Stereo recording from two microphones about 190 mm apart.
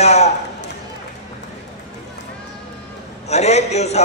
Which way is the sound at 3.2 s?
35° left (ahead or behind).